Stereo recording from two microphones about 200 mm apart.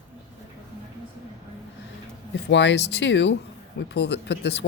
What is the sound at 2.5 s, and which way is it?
Speech, 60° left (ahead or behind).